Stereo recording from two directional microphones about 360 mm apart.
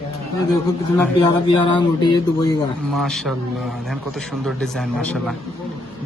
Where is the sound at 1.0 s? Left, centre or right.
Centre.